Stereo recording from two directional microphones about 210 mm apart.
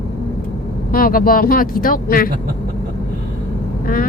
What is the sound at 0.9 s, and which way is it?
Speech, 45° left (ahead or behind).